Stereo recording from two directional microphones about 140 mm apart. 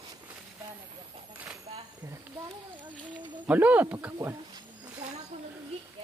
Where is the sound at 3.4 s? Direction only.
10° right (ahead or behind).